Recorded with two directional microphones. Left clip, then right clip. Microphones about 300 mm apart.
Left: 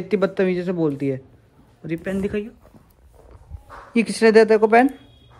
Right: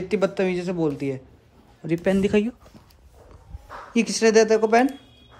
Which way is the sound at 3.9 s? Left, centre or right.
Centre.